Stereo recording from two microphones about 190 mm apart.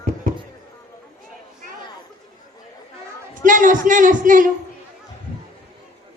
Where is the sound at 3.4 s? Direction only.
45° right (ahead or behind).